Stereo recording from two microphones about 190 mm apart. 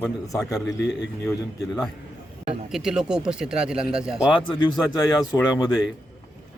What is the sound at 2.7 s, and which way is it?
Speech, 5° right (ahead or behind).